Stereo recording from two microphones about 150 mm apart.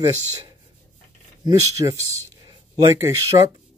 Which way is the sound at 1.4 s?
25° right (ahead or behind).